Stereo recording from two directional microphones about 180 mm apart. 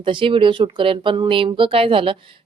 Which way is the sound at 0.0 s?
25° right (ahead or behind).